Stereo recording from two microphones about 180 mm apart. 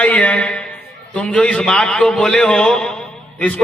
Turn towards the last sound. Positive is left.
turn(degrees=5)  # may be behind; listen again after turning